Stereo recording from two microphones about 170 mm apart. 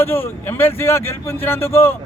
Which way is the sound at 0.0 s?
15° left (ahead or behind).